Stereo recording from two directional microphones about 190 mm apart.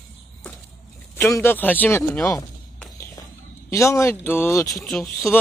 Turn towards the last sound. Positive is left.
turn(degrees=5)  # may be behind; listen again after turning